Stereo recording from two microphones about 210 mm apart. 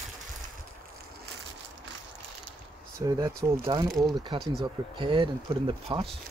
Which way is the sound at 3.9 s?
Centre (ahead or behind).